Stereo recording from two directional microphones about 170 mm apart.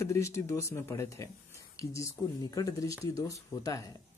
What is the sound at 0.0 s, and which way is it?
Speech, 15° left (ahead or behind).